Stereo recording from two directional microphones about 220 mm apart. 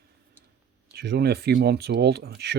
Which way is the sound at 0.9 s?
45° right (ahead or behind).